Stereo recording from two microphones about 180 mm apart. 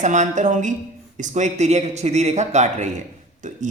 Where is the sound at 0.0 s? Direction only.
45° right (ahead or behind).